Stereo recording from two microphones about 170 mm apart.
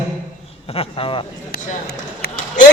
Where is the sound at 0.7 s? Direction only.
35° left (ahead or behind).